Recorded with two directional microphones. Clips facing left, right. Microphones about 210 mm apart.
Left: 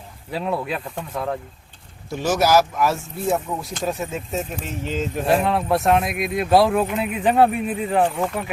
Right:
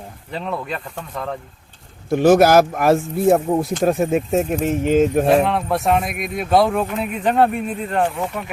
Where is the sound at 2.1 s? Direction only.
55° right (ahead or behind).